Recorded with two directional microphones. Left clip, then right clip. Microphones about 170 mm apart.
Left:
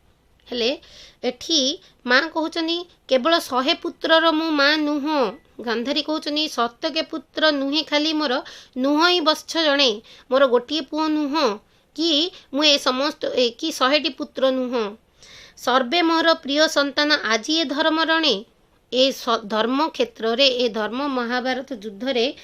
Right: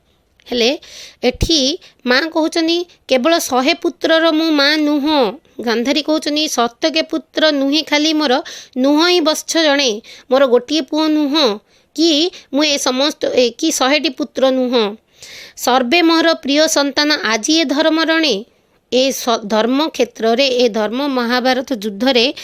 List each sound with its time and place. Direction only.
0.4 s a woman's voice: 50° right (ahead or behind)
14.7 s a woman's voice: 50° right (ahead or behind)
21.2 s speech: 60° right (ahead or behind); by 22.4 s 80° right